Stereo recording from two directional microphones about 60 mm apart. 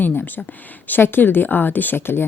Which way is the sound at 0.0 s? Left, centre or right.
Left.